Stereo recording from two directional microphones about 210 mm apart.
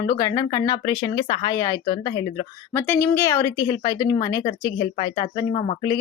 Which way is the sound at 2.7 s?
10° left (ahead or behind).